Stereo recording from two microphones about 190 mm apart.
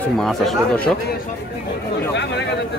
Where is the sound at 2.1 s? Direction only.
65° left (ahead or behind).